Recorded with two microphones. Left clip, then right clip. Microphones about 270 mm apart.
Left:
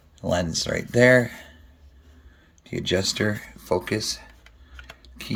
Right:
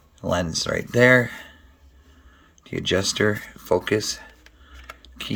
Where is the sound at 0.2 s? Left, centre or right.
Centre.